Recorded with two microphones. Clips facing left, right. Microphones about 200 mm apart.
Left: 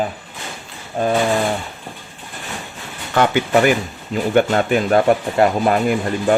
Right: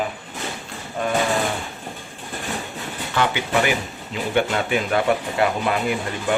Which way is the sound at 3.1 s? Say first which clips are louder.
Left 6 dB; 45° left (ahead or behind).